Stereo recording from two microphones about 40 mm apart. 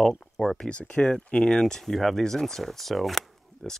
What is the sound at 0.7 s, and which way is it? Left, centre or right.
Speech, left.